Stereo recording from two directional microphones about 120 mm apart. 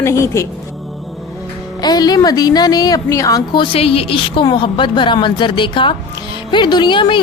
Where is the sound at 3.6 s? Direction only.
55° left (ahead or behind).